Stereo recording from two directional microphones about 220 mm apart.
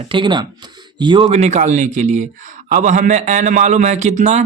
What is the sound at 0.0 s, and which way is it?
Speech, 20° right (ahead or behind).